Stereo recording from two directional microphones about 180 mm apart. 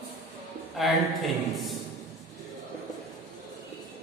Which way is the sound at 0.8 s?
Centre (ahead or behind).